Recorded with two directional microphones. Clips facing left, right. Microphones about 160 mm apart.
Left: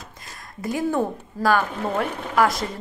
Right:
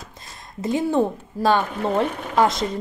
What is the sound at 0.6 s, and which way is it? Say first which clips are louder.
A woman's voice: right 3 dB; 25° right (ahead or behind).